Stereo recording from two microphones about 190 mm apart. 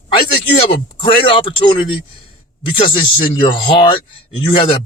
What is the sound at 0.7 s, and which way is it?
Speech, 30° left (ahead or behind).